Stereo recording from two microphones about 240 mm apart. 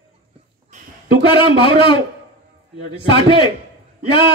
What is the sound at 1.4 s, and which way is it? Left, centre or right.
Speech, left.